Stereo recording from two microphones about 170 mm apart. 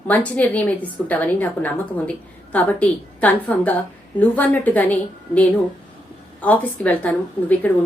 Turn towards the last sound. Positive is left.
turn(degrees=10)  # may be behind; listen again after turning